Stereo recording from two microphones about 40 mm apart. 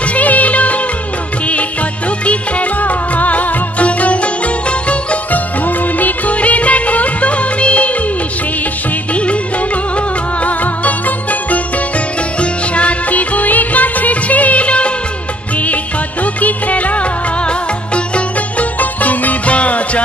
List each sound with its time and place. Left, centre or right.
0.1 s music of bollywood: left
2.2 s music: left
5.3 s music of bollywood: left
9.1 s music: left
16.3 s music: left
18.8 s music: left